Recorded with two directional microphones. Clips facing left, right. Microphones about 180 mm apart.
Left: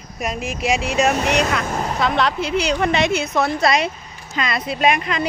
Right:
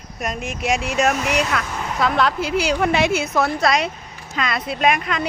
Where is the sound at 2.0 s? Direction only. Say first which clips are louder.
Right 2 dB; centre (ahead or behind).